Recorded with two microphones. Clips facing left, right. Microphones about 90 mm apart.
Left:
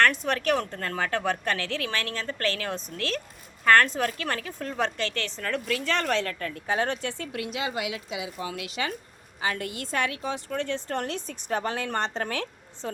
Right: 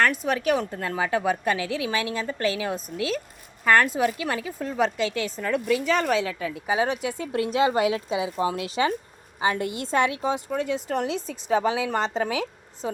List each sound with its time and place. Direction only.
0.0 s a woman's voice: 5° right (ahead or behind)
7.3 s a woman's voice: 35° right (ahead or behind)
10.5 s a woman's voice: 10° right (ahead or behind)